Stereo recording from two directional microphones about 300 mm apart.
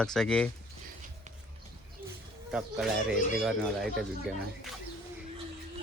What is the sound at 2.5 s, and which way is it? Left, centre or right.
Speech, centre.